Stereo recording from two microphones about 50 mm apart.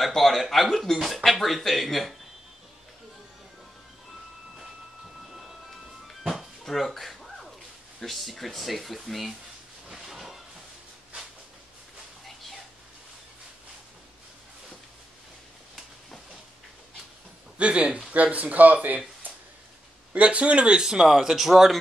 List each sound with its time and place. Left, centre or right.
0.0 s speech: centre
5.3 s music: centre
6.6 s a sound: centre
8.0 s speech: centre
9.8 s hiss: centre
12.3 s a sound: centre
17.6 s a man's voice: right
20.2 s speech: right; by 21.7 s centre